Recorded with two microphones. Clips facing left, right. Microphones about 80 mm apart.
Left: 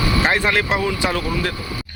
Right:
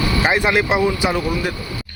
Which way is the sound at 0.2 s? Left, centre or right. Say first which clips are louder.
Right 3 dB; centre.